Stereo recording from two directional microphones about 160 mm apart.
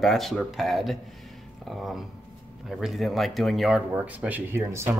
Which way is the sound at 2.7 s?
Centre (ahead or behind).